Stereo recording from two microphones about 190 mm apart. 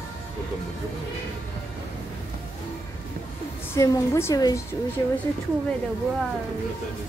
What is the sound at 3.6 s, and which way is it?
Speech, 15° left (ahead or behind).